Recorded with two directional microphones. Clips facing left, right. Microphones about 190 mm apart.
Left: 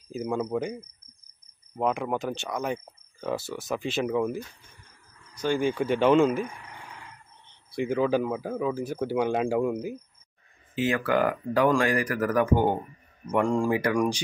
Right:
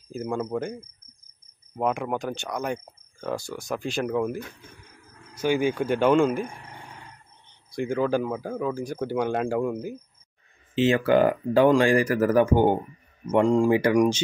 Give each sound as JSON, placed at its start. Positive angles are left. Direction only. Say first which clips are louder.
{"t": 0.2, "sound": "speech", "louder": "even", "side_deg": -5}
{"t": 1.8, "sound": "speech", "louder": "right 1 dB", "side_deg": 0}
{"t": 4.4, "sound": "a sound", "louder": "right 1 dB", "side_deg": -60}
{"t": 5.3, "sound": "speech", "louder": "right 2 dB", "side_deg": -5}
{"t": 6.5, "sound": "cricket", "louder": "right 1 dB", "side_deg": -40}
{"t": 7.7, "sound": "speech", "louder": "even", "side_deg": 5}
{"t": 10.7, "sound": "speech", "louder": "right 5 dB", "side_deg": -25}